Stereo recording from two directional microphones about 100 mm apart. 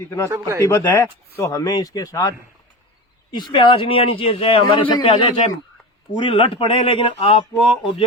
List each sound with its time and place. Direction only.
0.3 s speech: 25° right (ahead or behind)
0.6 s speech: 25° left (ahead or behind)
1.0 s speech: 35° left (ahead or behind)
3.3 s speech: 55° left (ahead or behind)
4.7 s speech: 55° left (ahead or behind); by 7.4 s 70° left (ahead or behind)